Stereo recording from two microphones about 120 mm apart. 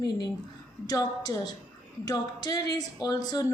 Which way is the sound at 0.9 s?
30° left (ahead or behind).